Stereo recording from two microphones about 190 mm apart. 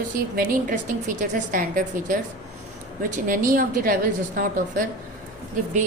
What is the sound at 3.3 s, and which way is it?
A woman's voice, 45° right (ahead or behind).